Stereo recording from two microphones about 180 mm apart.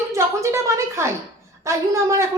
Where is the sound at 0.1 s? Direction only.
15° right (ahead or behind).